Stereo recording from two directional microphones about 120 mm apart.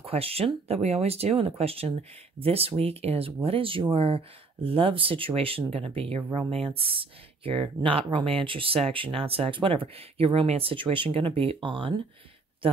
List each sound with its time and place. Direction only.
0.0 s speech: 55° right (ahead or behind)